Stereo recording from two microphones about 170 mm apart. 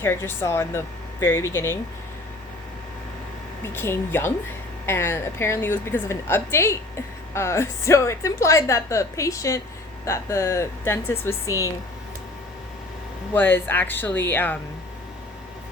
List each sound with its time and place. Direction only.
0.0 s a woman's voice: 15° left (ahead or behind)
3.6 s a woman's voice: 15° left (ahead or behind)
13.3 s a woman's voice: 10° left (ahead or behind)